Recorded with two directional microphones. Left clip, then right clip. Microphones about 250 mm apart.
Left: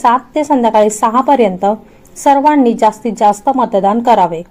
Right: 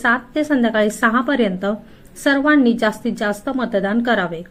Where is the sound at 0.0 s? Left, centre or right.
Left.